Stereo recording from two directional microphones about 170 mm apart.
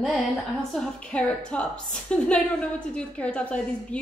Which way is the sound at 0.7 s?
5° left (ahead or behind).